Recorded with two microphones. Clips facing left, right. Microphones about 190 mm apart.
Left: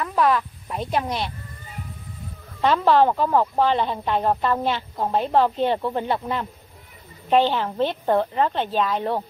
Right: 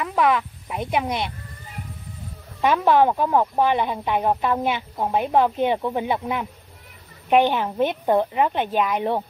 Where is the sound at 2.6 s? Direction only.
10° right (ahead or behind).